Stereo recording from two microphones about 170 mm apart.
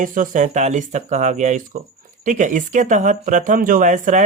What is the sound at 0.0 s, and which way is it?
Speech, 50° right (ahead or behind).